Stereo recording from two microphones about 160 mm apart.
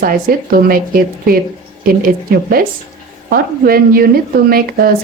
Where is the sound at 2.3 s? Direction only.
65° right (ahead or behind).